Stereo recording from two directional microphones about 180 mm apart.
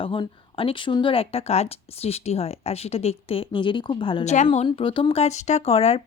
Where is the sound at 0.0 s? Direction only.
30° left (ahead or behind).